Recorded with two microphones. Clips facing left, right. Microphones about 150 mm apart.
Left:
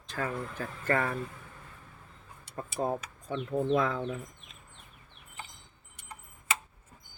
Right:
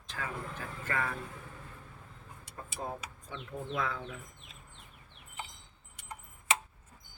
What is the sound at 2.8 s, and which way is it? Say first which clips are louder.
Speech: left 9 dB; 50° left (ahead or behind).